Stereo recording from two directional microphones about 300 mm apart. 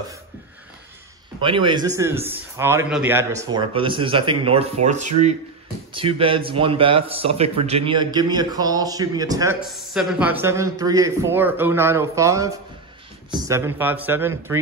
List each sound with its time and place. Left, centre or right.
1.4 s a man's voice: centre